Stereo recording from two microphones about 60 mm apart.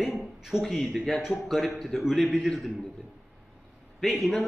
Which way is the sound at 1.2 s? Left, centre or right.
Centre.